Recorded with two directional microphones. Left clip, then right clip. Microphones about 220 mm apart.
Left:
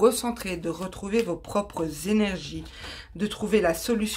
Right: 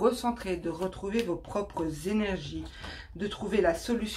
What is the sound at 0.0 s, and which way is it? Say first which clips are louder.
Speech: left 5 dB; 45° left (ahead or behind).